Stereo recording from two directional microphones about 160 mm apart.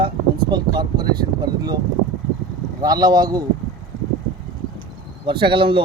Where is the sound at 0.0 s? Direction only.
30° right (ahead or behind).